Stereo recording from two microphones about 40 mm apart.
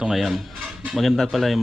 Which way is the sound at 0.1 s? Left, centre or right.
Centre.